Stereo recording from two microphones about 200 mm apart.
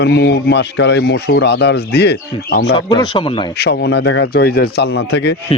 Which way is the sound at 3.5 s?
55° left (ahead or behind).